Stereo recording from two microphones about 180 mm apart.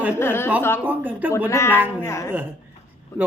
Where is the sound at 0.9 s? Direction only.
10° right (ahead or behind).